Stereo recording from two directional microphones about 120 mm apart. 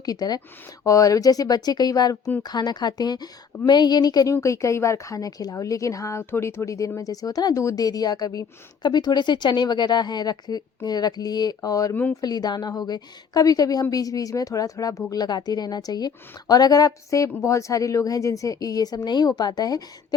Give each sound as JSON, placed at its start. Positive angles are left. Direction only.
{"t": 0.0, "sound": "a woman's voice", "side_deg": 35}